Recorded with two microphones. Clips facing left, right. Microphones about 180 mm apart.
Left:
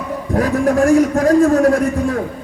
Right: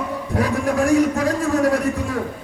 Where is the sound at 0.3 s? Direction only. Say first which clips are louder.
Left 5 dB; 45° left (ahead or behind).